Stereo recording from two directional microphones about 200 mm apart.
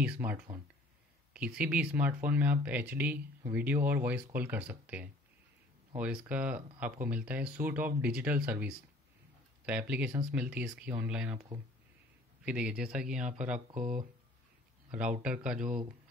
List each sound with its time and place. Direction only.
0.0 s speech: 5° right (ahead or behind)
12.4 s speech: 5° right (ahead or behind)
14.9 s speech: 5° right (ahead or behind)